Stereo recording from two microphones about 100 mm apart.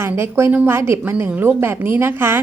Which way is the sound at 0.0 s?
25° right (ahead or behind).